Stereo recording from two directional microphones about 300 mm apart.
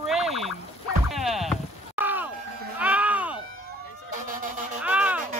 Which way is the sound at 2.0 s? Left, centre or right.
Centre.